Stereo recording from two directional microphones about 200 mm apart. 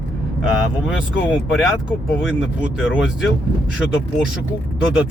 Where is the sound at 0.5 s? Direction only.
5° right (ahead or behind).